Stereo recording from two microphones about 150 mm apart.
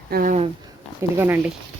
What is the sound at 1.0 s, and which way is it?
Speech, 20° right (ahead or behind).